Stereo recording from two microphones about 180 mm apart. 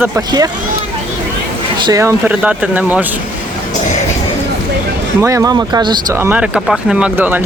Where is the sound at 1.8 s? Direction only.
15° right (ahead or behind).